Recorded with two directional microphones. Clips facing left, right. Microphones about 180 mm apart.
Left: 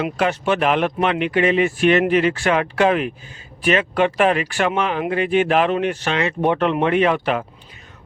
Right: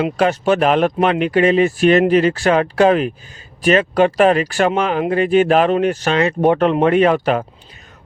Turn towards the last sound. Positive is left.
turn(degrees=-40)  # may be behind; listen again after turning